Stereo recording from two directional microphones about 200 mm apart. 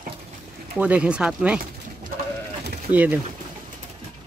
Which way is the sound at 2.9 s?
5° right (ahead or behind).